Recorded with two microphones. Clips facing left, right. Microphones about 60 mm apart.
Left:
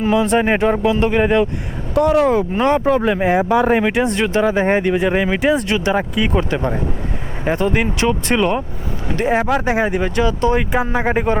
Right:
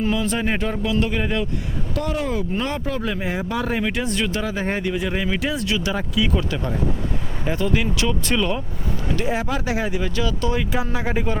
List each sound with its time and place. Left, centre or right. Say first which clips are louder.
0.1 s speech: left 7 dB; left
9.2 s speech: left 9 dB; left